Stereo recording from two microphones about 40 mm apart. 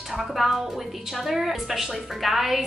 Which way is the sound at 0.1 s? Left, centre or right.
Centre.